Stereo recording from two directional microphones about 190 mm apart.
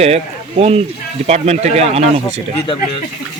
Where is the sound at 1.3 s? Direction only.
35° right (ahead or behind).